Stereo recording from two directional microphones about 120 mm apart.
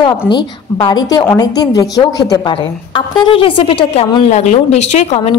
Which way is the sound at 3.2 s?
45° left (ahead or behind).